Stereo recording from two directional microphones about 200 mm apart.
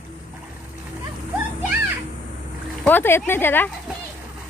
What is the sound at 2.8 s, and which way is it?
Speech, 10° left (ahead or behind).